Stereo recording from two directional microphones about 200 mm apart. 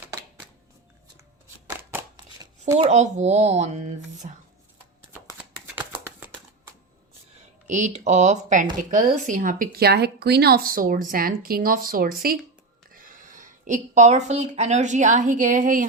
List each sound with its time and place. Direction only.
1.6 s a sound: 15° right (ahead or behind)
2.7 s speech: 35° right (ahead or behind)
5.3 s shuffling cards: 10° right (ahead or behind)
7.7 s a woman's voice: 35° right (ahead or behind)